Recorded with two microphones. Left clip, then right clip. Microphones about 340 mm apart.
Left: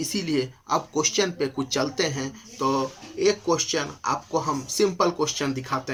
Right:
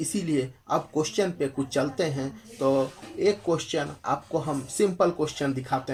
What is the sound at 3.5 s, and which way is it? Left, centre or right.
Speech, left.